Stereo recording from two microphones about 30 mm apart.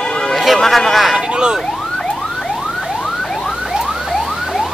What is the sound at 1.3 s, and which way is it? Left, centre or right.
Speech, right.